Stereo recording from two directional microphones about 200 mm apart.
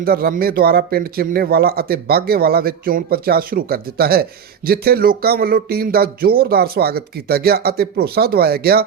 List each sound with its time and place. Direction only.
0.0 s speech: 50° right (ahead or behind)